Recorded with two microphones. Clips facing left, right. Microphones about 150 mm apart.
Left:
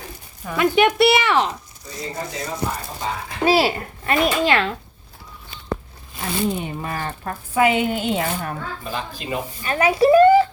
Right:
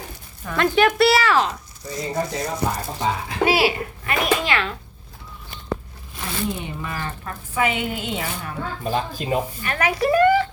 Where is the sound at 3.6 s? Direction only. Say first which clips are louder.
Even; 35° left (ahead or behind).